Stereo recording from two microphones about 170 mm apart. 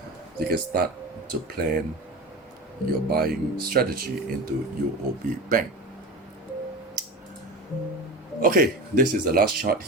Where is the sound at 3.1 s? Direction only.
60° right (ahead or behind).